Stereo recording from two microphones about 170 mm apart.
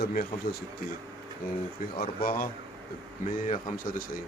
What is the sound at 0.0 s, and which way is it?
Speech, 65° left (ahead or behind).